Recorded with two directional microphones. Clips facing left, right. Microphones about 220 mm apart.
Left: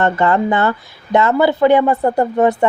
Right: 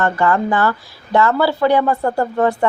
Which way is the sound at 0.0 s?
20° left (ahead or behind).